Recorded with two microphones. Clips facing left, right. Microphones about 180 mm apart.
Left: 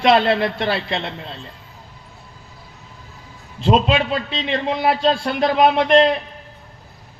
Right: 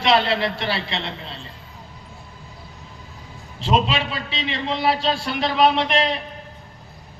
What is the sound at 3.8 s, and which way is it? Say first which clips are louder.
A man's voice: left 6 dB; 50° left (ahead or behind).